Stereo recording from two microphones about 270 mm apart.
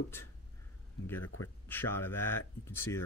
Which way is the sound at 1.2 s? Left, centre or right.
Left.